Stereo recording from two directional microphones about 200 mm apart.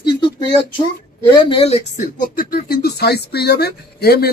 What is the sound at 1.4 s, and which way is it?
A man's voice, 30° left (ahead or behind).